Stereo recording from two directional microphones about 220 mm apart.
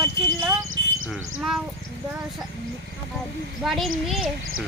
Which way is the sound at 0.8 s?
55° right (ahead or behind).